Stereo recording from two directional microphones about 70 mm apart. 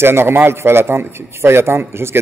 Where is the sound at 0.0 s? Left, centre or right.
Right.